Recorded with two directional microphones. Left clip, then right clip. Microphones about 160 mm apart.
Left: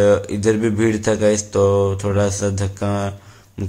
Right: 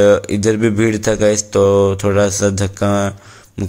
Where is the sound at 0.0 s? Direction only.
30° right (ahead or behind).